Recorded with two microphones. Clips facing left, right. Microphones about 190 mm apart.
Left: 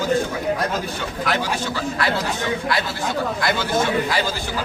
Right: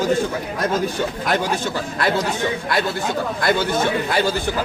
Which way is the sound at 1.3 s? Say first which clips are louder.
Right 1 dB; 50° right (ahead or behind).